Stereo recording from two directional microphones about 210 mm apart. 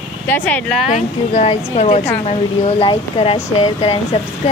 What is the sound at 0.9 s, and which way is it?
Speech, 35° left (ahead or behind).